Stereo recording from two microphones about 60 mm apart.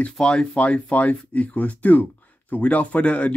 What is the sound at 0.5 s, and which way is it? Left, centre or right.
Speech, left.